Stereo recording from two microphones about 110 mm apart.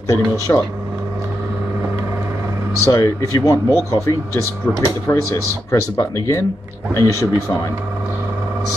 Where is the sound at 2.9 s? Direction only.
30° left (ahead or behind).